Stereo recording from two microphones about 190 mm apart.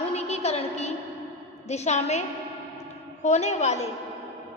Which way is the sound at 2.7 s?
35° left (ahead or behind).